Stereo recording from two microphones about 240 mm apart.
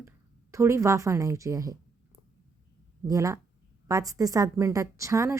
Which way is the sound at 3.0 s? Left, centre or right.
Centre.